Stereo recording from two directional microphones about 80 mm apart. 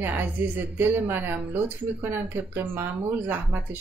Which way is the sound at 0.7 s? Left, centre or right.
Right.